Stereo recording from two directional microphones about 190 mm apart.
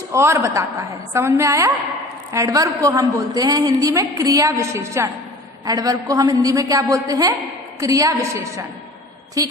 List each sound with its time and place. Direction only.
0.1 s a woman's voice: 15° right (ahead or behind)